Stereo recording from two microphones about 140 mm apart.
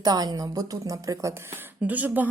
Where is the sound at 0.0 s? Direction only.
25° right (ahead or behind).